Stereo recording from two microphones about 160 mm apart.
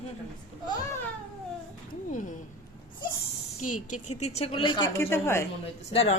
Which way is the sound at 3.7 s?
50° left (ahead or behind).